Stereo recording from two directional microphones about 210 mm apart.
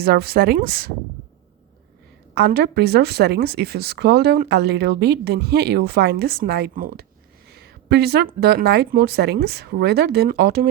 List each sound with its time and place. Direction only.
0.0 s speech: 50° right (ahead or behind)
2.3 s speech: 50° right (ahead or behind)
7.5 s a sound: 50° right (ahead or behind)
8.4 s speech: 50° right (ahead or behind)